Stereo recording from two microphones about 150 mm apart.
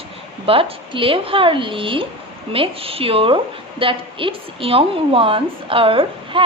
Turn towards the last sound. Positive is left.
turn(degrees=-35)  # may be behind; listen again after turning